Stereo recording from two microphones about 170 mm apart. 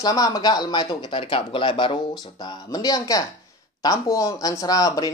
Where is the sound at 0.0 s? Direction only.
20° left (ahead or behind).